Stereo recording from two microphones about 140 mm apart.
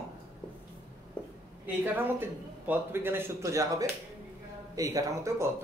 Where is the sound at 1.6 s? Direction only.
15° right (ahead or behind).